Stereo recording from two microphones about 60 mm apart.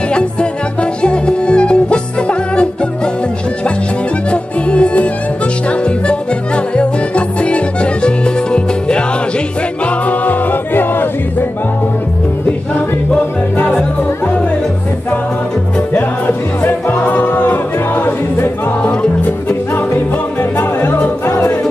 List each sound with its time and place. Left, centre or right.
0.1 s music: centre
4.3 s music: centre
9.8 s music: left
15.9 s music: left